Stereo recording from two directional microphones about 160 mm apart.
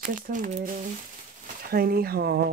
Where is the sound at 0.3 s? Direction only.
55° right (ahead or behind).